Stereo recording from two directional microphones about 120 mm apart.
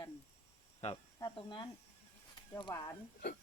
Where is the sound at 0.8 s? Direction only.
65° left (ahead or behind).